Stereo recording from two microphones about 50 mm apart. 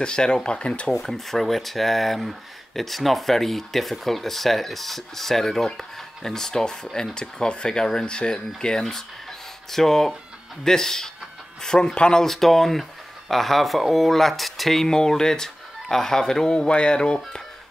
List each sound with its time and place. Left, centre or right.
0.0 s speech: centre
1.0 s speech: centre
12.3 s speech: centre